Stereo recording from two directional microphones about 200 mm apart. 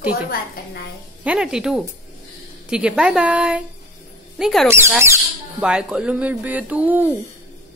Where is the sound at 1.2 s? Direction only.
5° right (ahead or behind).